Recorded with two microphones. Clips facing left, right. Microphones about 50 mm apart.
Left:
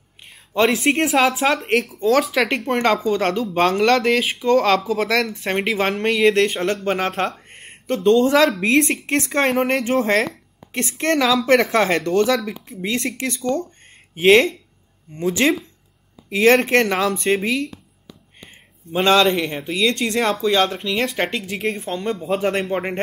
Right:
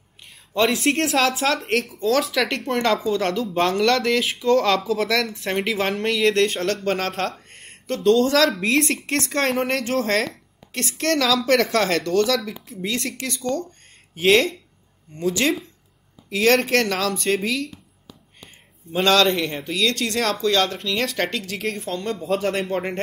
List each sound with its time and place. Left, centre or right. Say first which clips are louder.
0.5 s a woman's voice: left 2 dB; centre